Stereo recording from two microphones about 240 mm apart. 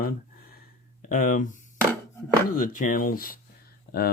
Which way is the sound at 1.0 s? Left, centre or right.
Left.